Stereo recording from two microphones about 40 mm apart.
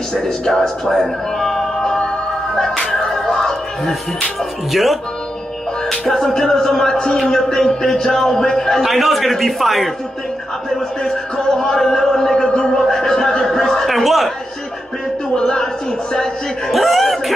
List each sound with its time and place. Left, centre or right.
0.1 s speech: centre
1.9 s music: centre
5.9 s speech: centre
8.8 s a man's voice: centre
11.1 s speech: centre
12.4 s a sound: centre
13.8 s a sound: centre
15.3 s a sound: centre
16.7 s chuckle: centre